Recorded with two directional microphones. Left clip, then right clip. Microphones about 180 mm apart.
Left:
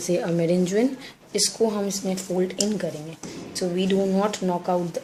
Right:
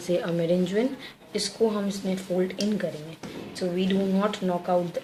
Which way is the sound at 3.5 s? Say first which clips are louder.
Left 4 dB; 30° left (ahead or behind).